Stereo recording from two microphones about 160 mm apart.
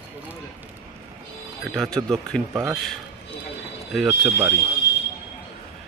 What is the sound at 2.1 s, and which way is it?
A man's voice, 5° left (ahead or behind).